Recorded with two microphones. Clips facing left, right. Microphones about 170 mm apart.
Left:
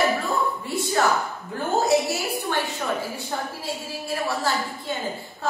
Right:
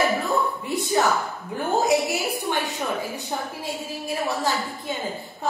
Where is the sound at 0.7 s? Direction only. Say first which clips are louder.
Even; 15° right (ahead or behind).